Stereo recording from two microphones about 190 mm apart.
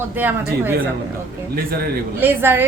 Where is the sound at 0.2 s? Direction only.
10° right (ahead or behind).